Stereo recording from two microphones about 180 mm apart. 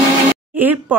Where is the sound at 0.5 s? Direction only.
10° right (ahead or behind).